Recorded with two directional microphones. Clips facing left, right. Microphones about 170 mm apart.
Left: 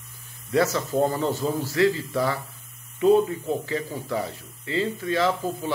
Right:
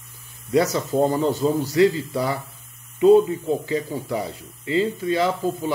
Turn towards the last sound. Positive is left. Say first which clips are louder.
# right 2 dB
turn(degrees=-15)  # may be behind; listen again after turning